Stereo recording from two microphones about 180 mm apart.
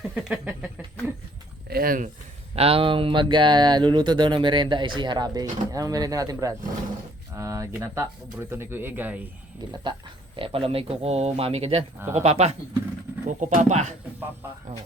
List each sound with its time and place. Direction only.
0.1 s a sound: 5° right (ahead or behind)
1.7 s speech: 50° right (ahead or behind)
2.6 s speech: 30° right (ahead or behind); by 9.2 s 10° right (ahead or behind)
10.3 s speech: 30° right (ahead or behind)